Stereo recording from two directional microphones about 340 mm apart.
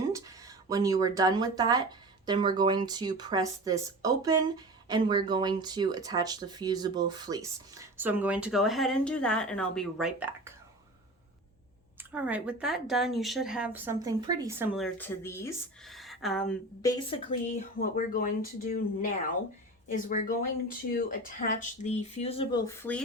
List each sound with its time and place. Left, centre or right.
0.1 s speech: centre
11.9 s speech: centre
17.7 s speech: left; by 23.0 s centre